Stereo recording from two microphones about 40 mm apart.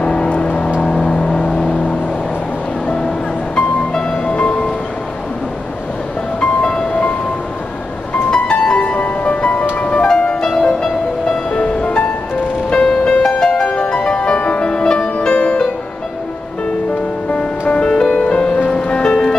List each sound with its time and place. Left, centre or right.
0.0 s vehicle: left
3.5 s music: left
4.3 s music: left
6.4 s music: left
8.3 s music: left
8.7 s music: left
10.0 s music: left
17.3 s music: left